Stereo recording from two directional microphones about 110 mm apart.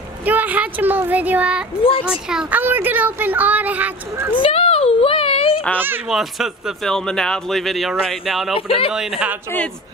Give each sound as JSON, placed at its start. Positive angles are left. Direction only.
{"t": 0.2, "sound": "speech", "side_deg": -15}
{"t": 2.6, "sound": "speech", "side_deg": -15}
{"t": 4.4, "sound": "a sound", "side_deg": 60}
{"t": 6.0, "sound": "speech", "side_deg": -5}
{"t": 8.5, "sound": "speech", "side_deg": 55}
{"t": 8.9, "sound": "speech", "side_deg": -5}